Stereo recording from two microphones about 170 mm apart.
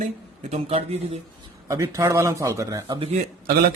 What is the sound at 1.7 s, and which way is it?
Speech, 15° right (ahead or behind).